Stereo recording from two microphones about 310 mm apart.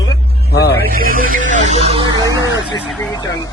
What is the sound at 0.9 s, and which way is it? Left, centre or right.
Music, right.